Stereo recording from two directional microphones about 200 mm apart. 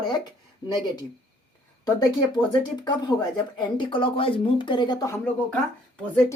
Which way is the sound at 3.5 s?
25° left (ahead or behind).